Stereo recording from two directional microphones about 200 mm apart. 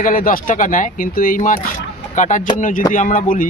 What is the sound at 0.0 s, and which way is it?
Speech, 45° left (ahead or behind).